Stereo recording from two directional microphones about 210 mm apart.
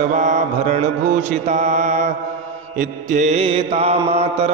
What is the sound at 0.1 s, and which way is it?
Mantra, 35° right (ahead or behind).